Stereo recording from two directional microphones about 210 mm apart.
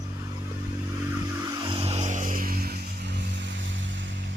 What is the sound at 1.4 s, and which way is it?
Vehicle, 20° right (ahead or behind).